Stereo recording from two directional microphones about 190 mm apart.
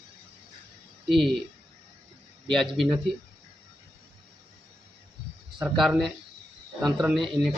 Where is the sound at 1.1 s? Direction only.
Centre (ahead or behind).